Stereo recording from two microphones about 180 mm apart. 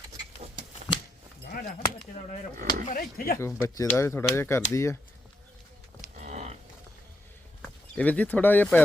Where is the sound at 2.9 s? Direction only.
55° left (ahead or behind).